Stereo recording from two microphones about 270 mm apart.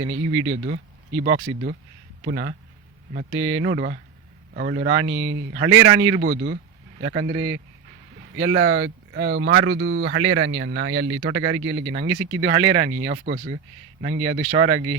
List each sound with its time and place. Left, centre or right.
0.0 s a man's voice: right
2.2 s speech: right
3.3 s a man's voice: right
4.5 s speech: right
4.9 s a man's voice: right
6.2 s speech: right
7.0 s a man's voice: right
9.2 s speech: right
9.5 s a man's voice: right